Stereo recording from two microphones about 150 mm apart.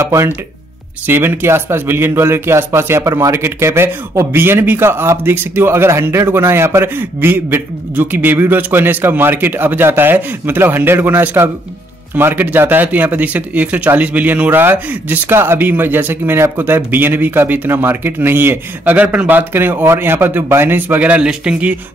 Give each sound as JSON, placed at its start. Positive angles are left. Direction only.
{"t": 0.0, "sound": "speech", "side_deg": -20}